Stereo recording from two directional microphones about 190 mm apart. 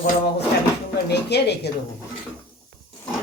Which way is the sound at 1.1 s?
60° left (ahead or behind).